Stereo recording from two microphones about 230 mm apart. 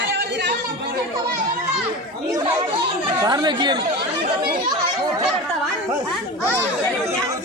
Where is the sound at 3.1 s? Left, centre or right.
Centre.